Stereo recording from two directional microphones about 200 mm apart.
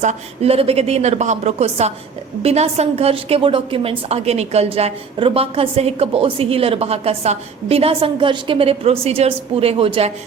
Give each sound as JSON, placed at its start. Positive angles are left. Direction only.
{"t": 0.0, "sound": "a woman's voice", "side_deg": -35}